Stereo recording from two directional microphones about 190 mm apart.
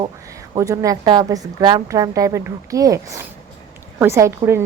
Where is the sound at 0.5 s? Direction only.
15° right (ahead or behind).